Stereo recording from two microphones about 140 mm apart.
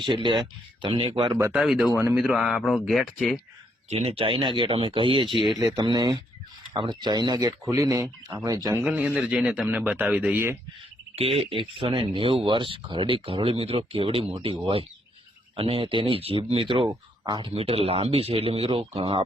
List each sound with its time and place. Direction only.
0.0 s speech: 35° right (ahead or behind)
1.5 s speech: 5° right (ahead or behind)
3.8 s speech: 45° right (ahead or behind); by 8.8 s 25° right (ahead or behind)
8.8 s speech: 10° right (ahead or behind)
11.1 s speech: 45° right (ahead or behind)
17.5 s speech: 45° right (ahead or behind)